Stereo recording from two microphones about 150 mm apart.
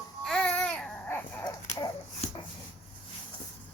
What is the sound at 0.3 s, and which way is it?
Baby cry, 5° left (ahead or behind).